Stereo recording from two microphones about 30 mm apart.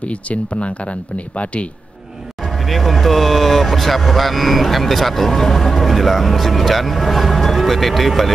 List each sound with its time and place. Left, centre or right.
0.0 s speech: left
2.4 s speech: centre